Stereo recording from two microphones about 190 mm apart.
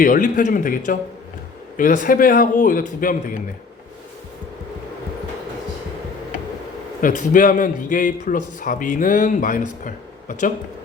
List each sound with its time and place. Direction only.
0.0 s a man's voice: 45° left (ahead or behind)
7.0 s a man's voice: 45° left (ahead or behind)